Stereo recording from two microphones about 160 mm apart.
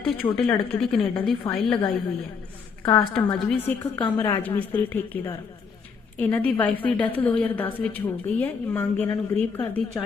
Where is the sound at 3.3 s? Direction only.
10° left (ahead or behind).